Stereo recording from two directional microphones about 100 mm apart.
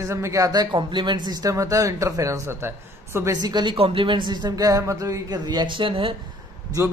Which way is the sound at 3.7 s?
65° right (ahead or behind).